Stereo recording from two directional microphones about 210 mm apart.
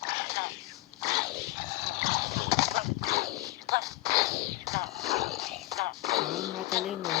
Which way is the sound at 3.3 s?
15° right (ahead or behind).